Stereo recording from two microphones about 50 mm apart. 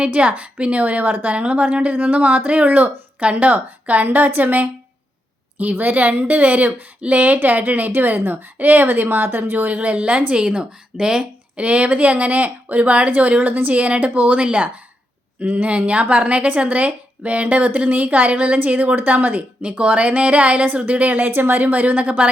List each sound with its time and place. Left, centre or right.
0.0 s a woman's voice: right
9.7 s a woman's voice: right